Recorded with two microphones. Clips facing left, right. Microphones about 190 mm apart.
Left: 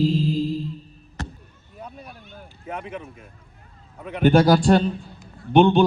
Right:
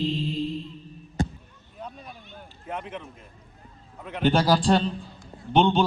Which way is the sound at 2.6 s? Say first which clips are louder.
Left 2 dB; 5° left (ahead or behind).